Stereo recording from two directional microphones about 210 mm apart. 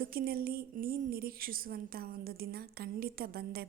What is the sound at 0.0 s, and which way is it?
A woman's voice, 45° right (ahead or behind).